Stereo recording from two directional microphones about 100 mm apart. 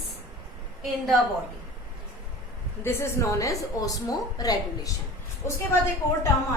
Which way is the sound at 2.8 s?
30° left (ahead or behind).